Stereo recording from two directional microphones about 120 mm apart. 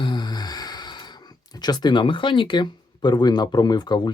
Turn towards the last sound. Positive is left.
turn(degrees=35)  # may be behind; listen again after turning